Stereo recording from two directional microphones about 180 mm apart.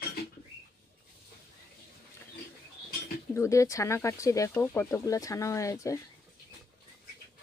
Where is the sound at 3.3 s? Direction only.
15° left (ahead or behind).